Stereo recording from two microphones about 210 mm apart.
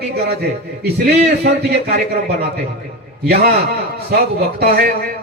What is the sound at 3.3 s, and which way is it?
A man's voice, 50° right (ahead or behind).